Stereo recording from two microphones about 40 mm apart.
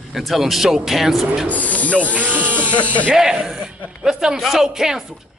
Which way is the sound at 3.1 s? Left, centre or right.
Centre.